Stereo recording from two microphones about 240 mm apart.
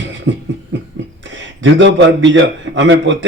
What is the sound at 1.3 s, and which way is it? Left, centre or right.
A man's voice, right.